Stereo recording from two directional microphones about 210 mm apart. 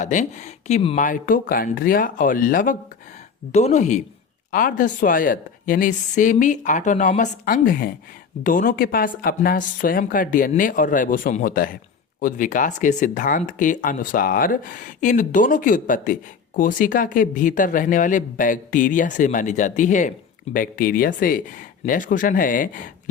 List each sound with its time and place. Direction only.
0.0 s speech: 35° left (ahead or behind)